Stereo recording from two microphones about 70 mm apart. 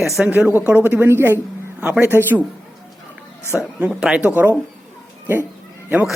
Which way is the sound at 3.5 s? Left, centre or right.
Right.